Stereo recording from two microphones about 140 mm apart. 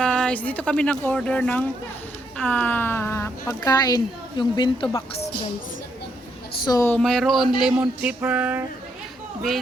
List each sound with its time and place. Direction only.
0.0 s speech: 5° left (ahead or behind); by 4.9 s 35° left (ahead or behind)
6.7 s speech: 20° left (ahead or behind)
6.9 s speech: 5° left (ahead or behind)
7.6 s a sound: 10° right (ahead or behind)